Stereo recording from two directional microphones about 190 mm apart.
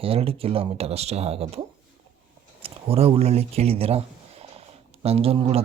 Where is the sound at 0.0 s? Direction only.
30° right (ahead or behind).